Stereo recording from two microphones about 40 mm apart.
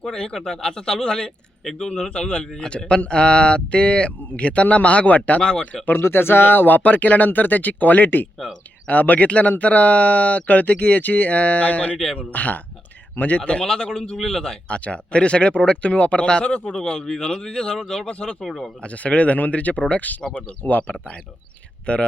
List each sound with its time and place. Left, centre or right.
0.0 s speech: centre
2.0 s speech: left
5.4 s speech: centre
6.0 s speech: left
13.4 s speech: left
13.7 s speech: centre
14.7 s speech: left; by 18.1 s centre
18.1 s speech: left
18.3 s speech: centre
18.8 s speech: left